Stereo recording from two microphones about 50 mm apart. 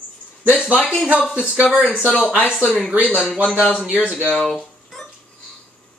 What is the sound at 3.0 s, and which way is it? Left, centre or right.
Speech, left.